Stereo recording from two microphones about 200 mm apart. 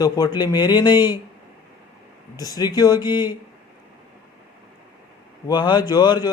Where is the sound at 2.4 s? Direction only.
20° left (ahead or behind).